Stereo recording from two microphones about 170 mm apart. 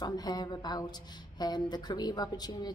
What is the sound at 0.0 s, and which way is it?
Speech, 25° left (ahead or behind).